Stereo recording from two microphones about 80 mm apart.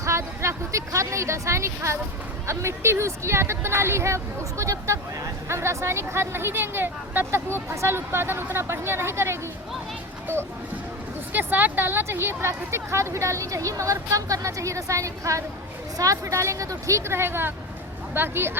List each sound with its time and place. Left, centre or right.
0.0 s a woman's voice: right
11.3 s a woman's voice: right